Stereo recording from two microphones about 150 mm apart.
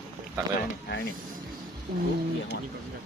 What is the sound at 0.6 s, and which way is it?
Speech, 90° left.